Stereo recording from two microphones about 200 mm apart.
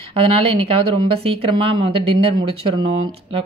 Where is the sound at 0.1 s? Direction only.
30° right (ahead or behind).